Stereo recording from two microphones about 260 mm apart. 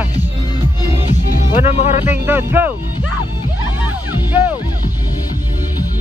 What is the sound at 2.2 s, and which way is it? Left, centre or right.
Speech, centre.